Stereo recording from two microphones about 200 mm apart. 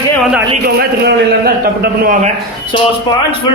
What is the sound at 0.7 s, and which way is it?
A man's voice, 50° right (ahead or behind).